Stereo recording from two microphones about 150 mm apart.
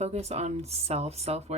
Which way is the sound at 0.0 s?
45° right (ahead or behind).